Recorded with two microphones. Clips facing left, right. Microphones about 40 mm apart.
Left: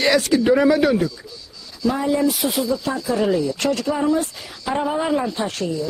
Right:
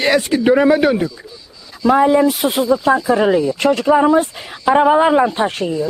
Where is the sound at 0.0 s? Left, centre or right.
Right.